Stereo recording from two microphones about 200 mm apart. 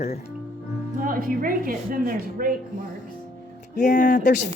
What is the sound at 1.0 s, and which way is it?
A woman's voice, 45° right (ahead or behind).